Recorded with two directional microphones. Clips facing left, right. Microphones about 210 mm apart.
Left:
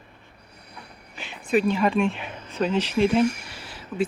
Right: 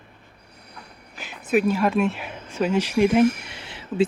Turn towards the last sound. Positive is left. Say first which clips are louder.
# right 5 dB
turn(degrees=-25)  # may be behind; listen again after turning